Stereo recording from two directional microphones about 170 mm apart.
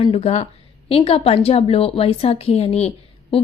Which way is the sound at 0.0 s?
35° left (ahead or behind).